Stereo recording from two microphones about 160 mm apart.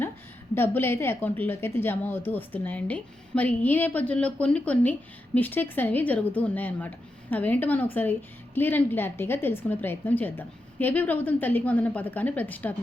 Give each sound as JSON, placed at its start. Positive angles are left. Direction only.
{"t": 0.5, "sound": "a woman's voice", "side_deg": 15}